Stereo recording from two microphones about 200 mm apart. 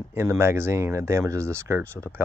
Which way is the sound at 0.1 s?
15° right (ahead or behind).